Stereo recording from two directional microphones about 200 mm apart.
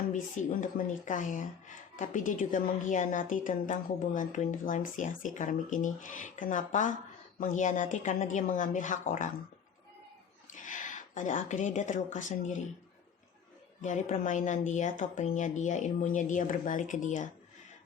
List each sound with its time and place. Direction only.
0.6 s speech: 40° left (ahead or behind)
10.5 s speech: 40° left (ahead or behind)
13.8 s speech: 35° left (ahead or behind)